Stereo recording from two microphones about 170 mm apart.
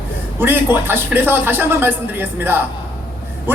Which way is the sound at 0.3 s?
15° right (ahead or behind).